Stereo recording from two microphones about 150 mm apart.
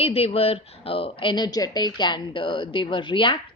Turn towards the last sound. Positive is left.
turn(degrees=35)  # may be behind; listen again after turning